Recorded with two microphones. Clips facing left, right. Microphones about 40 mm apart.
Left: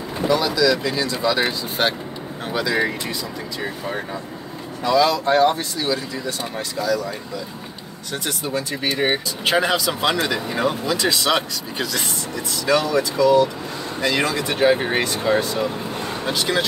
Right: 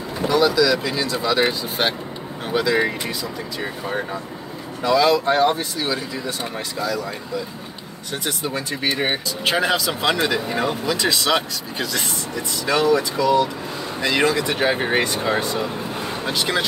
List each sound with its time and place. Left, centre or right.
0.4 s speech: centre
8.1 s speech: centre
9.0 s speech: centre
11.9 s speech: centre
16.0 s vehicle: centre